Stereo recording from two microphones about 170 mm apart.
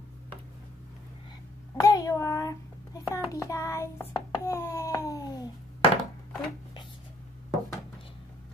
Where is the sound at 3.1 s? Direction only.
20° left (ahead or behind).